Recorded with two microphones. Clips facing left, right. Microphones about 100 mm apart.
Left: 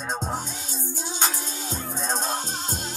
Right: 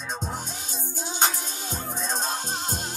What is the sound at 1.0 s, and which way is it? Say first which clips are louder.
Music: right 2 dB; 45° right (ahead or behind).